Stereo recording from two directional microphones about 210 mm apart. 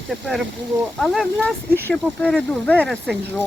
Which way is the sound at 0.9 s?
Centre (ahead or behind).